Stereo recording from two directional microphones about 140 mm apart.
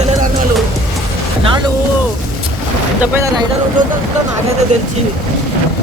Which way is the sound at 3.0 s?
15° right (ahead or behind).